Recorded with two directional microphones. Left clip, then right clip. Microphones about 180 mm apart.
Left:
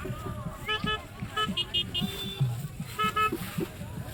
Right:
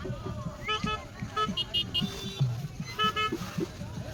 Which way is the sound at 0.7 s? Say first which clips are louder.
Left 1 dB; 60° right (ahead or behind).